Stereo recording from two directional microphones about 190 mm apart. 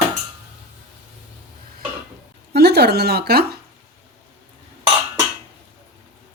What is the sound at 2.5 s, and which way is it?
Speech, 55° right (ahead or behind).